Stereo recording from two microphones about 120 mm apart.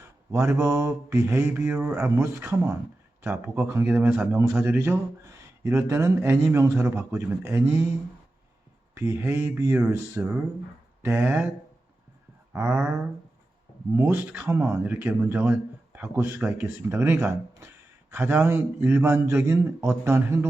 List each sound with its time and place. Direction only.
0.0 s a man's voice: 25° right (ahead or behind)
9.0 s a man's voice: 20° right (ahead or behind)
12.6 s a man's voice: 15° right (ahead or behind)